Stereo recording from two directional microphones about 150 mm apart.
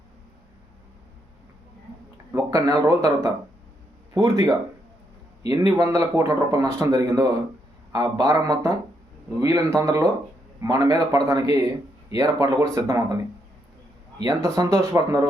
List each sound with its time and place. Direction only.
2.3 s speech: 20° right (ahead or behind)
14.2 s speech: 25° right (ahead or behind)